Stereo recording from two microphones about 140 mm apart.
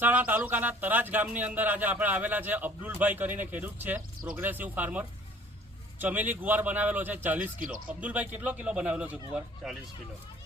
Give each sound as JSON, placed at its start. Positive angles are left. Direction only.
{"t": 0.0, "sound": "speech", "side_deg": -10}
{"t": 7.6, "sound": "speech", "side_deg": -80}
{"t": 8.0, "sound": "speech", "side_deg": -10}